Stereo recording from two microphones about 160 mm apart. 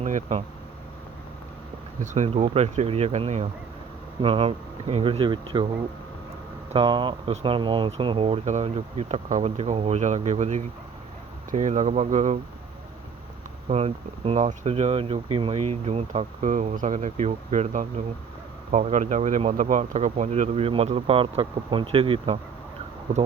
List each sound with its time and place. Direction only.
0.0 s speech: 50° right (ahead or behind)
2.0 s speech: 45° right (ahead or behind); by 5.6 s 30° right (ahead or behind)
6.7 s speech: 35° right (ahead or behind)
13.7 s speech: 40° right (ahead or behind)